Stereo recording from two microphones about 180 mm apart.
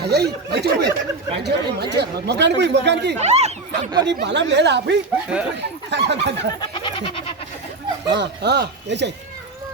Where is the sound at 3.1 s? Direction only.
40° right (ahead or behind).